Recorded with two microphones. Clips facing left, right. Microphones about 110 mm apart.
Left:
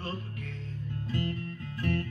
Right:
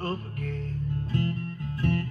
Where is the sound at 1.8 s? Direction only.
30° right (ahead or behind).